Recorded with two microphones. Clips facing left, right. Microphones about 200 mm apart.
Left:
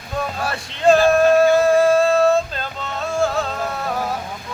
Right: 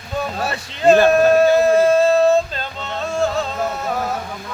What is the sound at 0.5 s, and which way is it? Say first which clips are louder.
Speech: right 1 dB; 5° right (ahead or behind).